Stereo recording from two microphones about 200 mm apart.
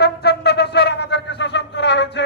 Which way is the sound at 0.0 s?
55° left (ahead or behind).